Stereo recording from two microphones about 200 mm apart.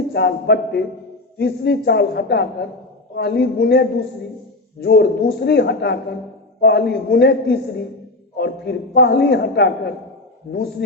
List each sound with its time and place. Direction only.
0.1 s a man's voice: 55° left (ahead or behind)